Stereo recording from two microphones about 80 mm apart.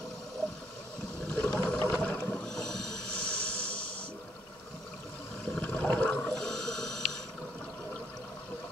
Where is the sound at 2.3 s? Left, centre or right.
Centre.